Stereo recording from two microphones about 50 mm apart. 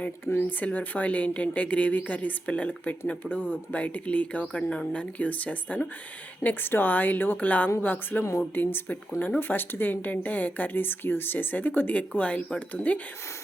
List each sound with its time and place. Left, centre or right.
0.3 s speech: left
11.9 s speech: left